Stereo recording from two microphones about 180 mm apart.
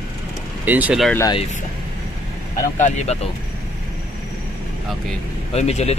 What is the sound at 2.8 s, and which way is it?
Speech, 40° left (ahead or behind).